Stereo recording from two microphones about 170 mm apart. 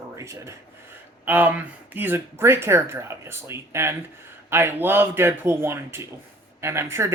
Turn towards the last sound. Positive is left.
turn(degrees=-15)  # may be behind; listen again after turning